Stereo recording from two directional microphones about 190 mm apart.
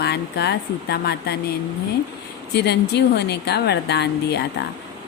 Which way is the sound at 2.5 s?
60° left (ahead or behind).